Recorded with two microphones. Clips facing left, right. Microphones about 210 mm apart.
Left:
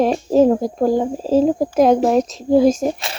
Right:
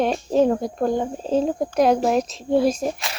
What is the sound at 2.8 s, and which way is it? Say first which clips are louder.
Speech: left 5 dB; 30° left (ahead or behind).